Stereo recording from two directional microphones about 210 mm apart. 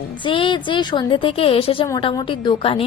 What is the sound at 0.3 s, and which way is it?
A woman's voice, 25° left (ahead or behind).